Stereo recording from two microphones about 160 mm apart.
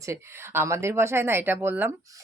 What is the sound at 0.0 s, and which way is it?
Speech, 15° right (ahead or behind).